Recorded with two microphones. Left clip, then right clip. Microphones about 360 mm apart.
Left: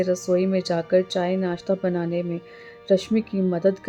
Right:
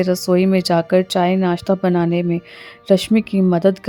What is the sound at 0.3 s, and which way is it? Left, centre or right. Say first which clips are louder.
Speech: right 6 dB; right.